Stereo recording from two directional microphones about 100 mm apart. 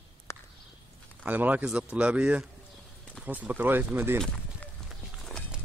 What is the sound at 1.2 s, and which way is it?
Speech, 15° right (ahead or behind).